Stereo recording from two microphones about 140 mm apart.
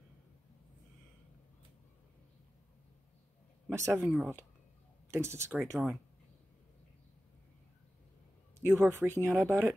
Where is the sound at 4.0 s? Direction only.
Centre (ahead or behind).